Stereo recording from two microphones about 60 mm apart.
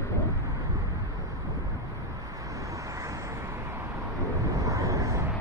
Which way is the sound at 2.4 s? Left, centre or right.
Right.